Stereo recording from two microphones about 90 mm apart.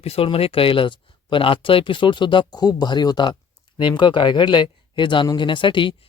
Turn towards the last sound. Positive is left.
turn(degrees=65)  # may be behind; listen again after turning